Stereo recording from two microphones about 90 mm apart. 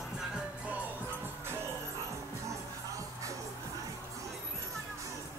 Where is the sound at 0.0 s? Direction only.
10° right (ahead or behind); by 1.8 s 25° right (ahead or behind).